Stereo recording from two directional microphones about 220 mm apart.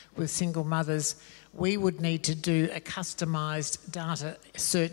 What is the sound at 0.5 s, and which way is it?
A man's voice, 20° left (ahead or behind).